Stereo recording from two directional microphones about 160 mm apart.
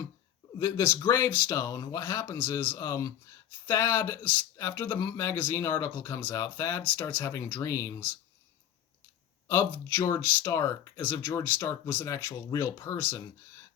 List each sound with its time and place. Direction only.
0.6 s speech: 15° left (ahead or behind)
9.5 s speech: 15° left (ahead or behind)